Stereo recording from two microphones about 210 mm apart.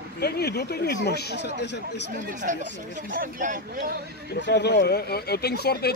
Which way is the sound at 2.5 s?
35° right (ahead or behind).